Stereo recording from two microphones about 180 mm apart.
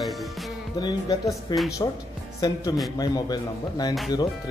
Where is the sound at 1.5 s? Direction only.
25° left (ahead or behind).